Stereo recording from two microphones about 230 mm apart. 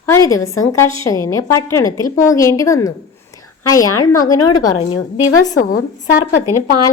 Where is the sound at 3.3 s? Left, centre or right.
Centre.